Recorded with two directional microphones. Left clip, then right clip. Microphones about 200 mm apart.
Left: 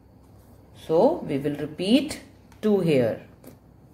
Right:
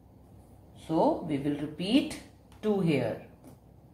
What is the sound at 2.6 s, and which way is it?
Speech, 50° left (ahead or behind).